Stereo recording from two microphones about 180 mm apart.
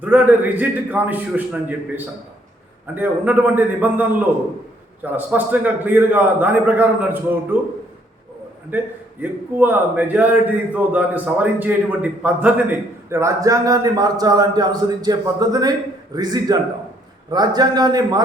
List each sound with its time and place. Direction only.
0.0 s a man's voice: 10° right (ahead or behind)
2.9 s a man's voice: 10° right (ahead or behind)
5.1 s a man's voice: 10° right (ahead or behind)
8.7 s a man's voice: 10° right (ahead or behind)